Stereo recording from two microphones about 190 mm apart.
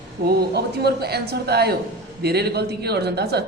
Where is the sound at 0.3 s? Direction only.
55° right (ahead or behind).